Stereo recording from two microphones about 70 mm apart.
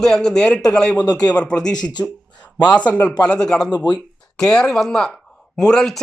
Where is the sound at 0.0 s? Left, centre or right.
Centre.